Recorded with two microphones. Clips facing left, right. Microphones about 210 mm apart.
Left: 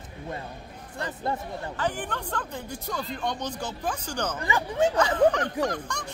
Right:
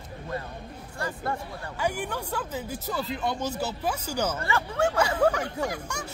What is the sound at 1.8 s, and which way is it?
Speech, 10° right (ahead or behind).